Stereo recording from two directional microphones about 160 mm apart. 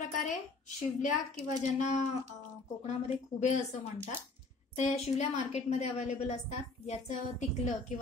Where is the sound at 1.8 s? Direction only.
50° left (ahead or behind).